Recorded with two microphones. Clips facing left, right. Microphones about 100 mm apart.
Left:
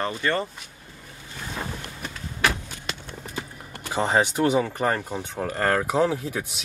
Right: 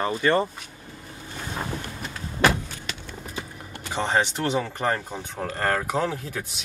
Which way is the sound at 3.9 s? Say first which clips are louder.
Left 2 dB; 10° left (ahead or behind).